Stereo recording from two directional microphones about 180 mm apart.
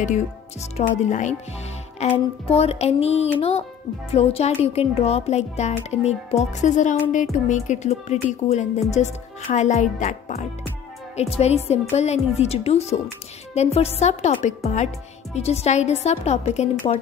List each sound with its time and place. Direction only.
0.0 s speech: 40° left (ahead or behind)